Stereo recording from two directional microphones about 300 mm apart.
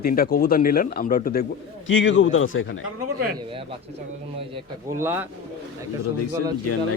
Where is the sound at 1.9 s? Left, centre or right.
Left.